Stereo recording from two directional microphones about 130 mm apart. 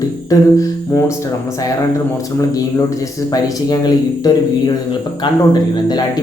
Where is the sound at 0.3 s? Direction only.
25° left (ahead or behind).